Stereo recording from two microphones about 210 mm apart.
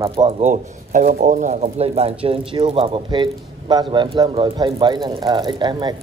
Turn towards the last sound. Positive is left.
turn(degrees=-20)  # may be behind; listen again after turning